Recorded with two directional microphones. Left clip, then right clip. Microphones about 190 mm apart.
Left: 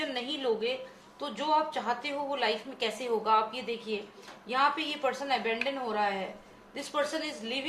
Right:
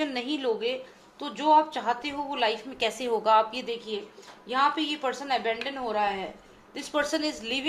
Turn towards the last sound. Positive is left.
turn(degrees=-45)  # may be behind; listen again after turning